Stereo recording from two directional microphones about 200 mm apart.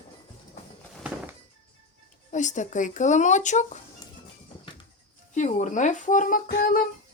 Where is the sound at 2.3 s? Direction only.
40° left (ahead or behind).